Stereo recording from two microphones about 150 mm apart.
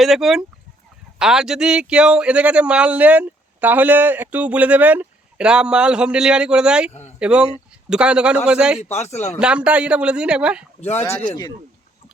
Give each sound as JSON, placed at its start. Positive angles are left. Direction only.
{"t": 0.0, "sound": "speech", "side_deg": 0}
{"t": 6.9, "sound": "a sound", "side_deg": 45}
{"t": 7.2, "sound": "speech", "side_deg": -5}
{"t": 8.8, "sound": "a man's voice", "side_deg": 45}
{"t": 9.4, "sound": "speech", "side_deg": -5}
{"t": 10.9, "sound": "speech", "side_deg": 15}
{"t": 11.3, "sound": "speech", "side_deg": 25}